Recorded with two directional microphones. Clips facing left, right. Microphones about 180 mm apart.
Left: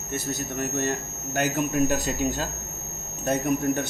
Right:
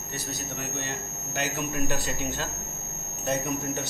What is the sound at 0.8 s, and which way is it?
Speech, 50° left (ahead or behind).